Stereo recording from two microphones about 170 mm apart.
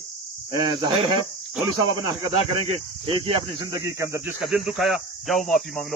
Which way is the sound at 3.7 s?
15° right (ahead or behind).